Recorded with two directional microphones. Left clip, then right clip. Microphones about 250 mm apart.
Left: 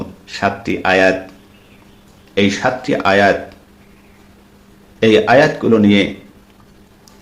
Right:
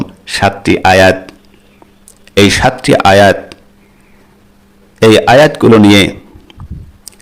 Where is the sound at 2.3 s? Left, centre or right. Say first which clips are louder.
Right 7 dB; right.